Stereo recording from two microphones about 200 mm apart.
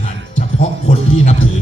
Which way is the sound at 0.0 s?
35° left (ahead or behind).